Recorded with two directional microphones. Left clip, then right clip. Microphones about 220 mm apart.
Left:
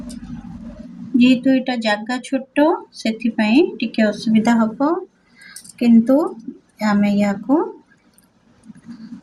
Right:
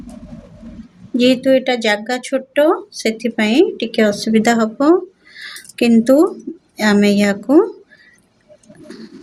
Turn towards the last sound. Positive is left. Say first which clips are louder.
# right 6 dB
turn(degrees=-55)  # may be behind; listen again after turning